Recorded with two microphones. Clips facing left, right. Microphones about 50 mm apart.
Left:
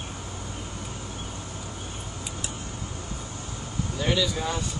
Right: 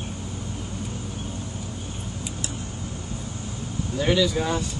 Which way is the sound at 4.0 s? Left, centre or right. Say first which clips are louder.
Right 5 dB; centre.